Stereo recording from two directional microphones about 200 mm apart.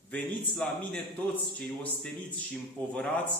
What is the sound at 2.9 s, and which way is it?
Speech, 5° left (ahead or behind).